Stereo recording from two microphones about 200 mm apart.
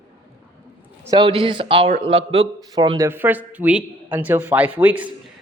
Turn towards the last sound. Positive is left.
turn(degrees=-5)  # may be behind; listen again after turning